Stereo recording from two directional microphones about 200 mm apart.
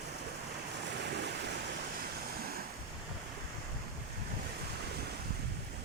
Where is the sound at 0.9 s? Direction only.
55° right (ahead or behind).